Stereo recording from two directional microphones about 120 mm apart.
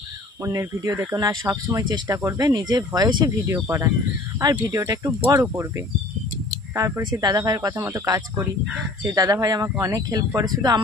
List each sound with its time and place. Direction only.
0.4 s speech: 25° right (ahead or behind)
1.4 s speech: 20° right (ahead or behind)
1.8 s speech: 30° right (ahead or behind)
5.5 s speech: 20° right (ahead or behind)
7.0 s speech: 35° right (ahead or behind)